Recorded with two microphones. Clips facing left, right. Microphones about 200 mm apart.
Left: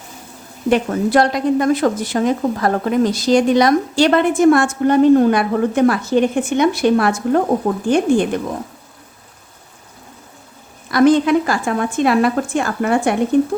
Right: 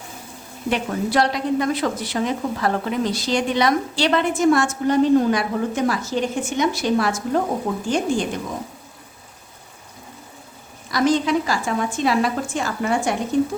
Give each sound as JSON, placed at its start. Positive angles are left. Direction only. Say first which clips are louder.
{"t": 0.7, "sound": "a woman's voice", "louder": "left 7 dB", "side_deg": 50}
{"t": 10.9, "sound": "a woman's voice", "louder": "left 7 dB", "side_deg": 55}